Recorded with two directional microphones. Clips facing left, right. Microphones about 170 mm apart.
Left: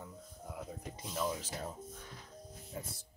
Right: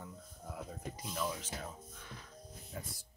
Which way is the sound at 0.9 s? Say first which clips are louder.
Left 3 dB; 30° left (ahead or behind).